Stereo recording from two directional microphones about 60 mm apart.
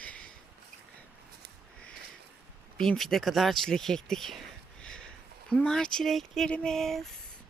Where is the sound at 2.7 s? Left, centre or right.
Centre.